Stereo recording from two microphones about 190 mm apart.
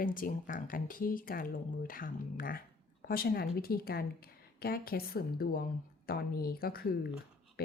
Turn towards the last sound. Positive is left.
turn(degrees=55)  # may be behind; listen again after turning